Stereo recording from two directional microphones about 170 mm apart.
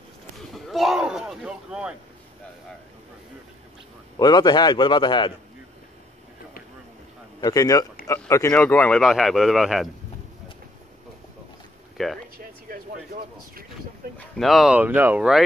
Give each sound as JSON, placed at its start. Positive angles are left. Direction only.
{"t": 0.7, "sound": "speech", "side_deg": 0}
{"t": 4.2, "sound": "a man's voice", "side_deg": 25}
{"t": 7.3, "sound": "a man's voice", "side_deg": 20}
{"t": 12.0, "sound": "speech", "side_deg": 0}
{"t": 12.6, "sound": "a sound", "side_deg": -55}
{"t": 14.1, "sound": "speech", "side_deg": 0}